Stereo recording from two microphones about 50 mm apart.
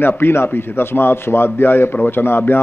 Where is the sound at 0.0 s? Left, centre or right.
Left.